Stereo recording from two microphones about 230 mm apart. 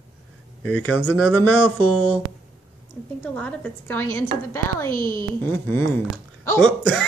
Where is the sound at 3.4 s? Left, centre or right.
Centre.